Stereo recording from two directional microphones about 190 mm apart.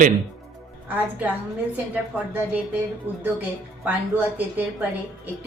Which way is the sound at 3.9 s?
10° right (ahead or behind).